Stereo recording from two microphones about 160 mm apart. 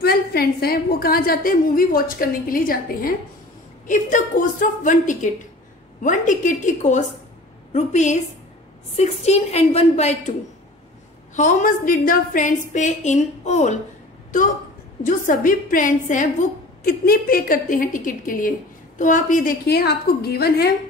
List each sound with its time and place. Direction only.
0.0 s a woman's voice: 75° left (ahead or behind)
3.8 s a woman's voice: 55° left (ahead or behind)
11.3 s a woman's voice: 55° left (ahead or behind)
15.0 s a woman's voice: 55° left (ahead or behind)
17.0 s a woman's voice: 65° left (ahead or behind)